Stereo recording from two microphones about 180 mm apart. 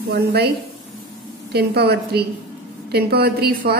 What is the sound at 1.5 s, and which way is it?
A woman's voice, 65° right (ahead or behind).